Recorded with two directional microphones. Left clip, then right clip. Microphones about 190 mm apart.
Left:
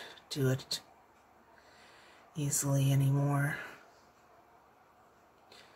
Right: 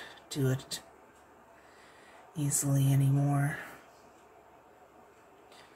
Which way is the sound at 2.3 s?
25° left (ahead or behind).